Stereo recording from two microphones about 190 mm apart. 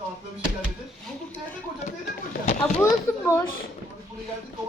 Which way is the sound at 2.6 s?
10° left (ahead or behind).